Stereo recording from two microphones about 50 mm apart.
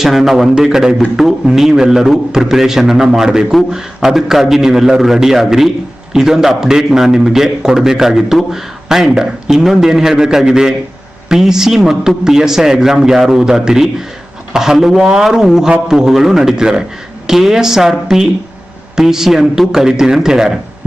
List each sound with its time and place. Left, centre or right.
0.0 s a man's voice: centre